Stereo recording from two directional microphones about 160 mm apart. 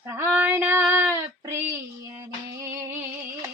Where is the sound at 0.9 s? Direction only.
15° right (ahead or behind).